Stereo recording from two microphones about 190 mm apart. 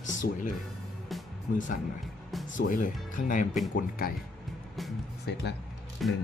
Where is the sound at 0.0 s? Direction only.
40° left (ahead or behind).